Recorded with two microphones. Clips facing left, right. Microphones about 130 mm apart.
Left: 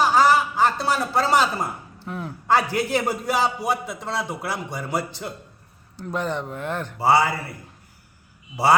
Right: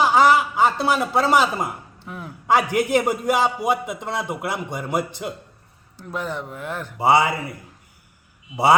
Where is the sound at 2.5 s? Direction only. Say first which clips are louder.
Right 2 dB; 15° right (ahead or behind).